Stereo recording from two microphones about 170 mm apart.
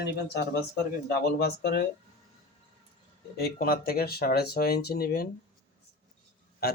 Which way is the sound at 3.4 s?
65° left (ahead or behind).